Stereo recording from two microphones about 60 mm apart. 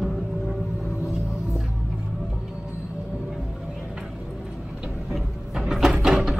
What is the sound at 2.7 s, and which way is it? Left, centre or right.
Music, right.